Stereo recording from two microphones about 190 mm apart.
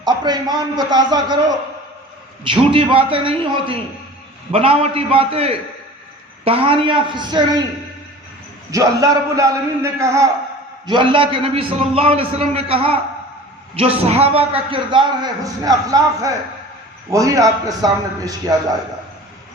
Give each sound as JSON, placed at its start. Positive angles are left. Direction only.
{"t": 0.0, "sound": "a man's voice", "side_deg": -20}
{"t": 8.7, "sound": "a man's voice", "side_deg": -15}